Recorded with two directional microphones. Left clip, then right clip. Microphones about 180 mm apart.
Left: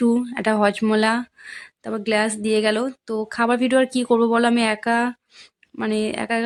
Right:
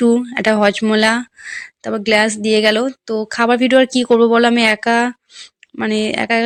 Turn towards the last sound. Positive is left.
turn(degrees=-20)  # may be behind; listen again after turning